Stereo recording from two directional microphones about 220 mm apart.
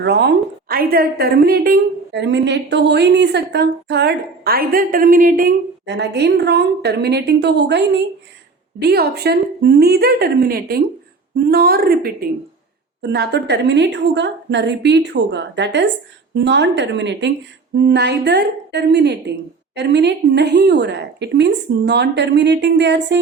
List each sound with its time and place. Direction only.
0.0 s a woman's voice: 50° right (ahead or behind)